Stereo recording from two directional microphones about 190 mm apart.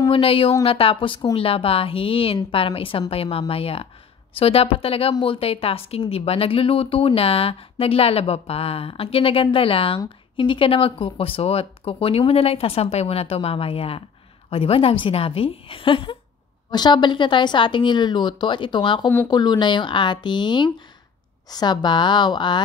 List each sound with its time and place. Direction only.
0.1 s a woman's voice: 30° left (ahead or behind)